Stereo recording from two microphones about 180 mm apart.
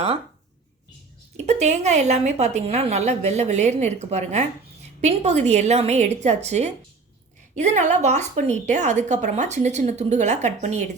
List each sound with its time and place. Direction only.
1.5 s a woman's voice: 40° right (ahead or behind)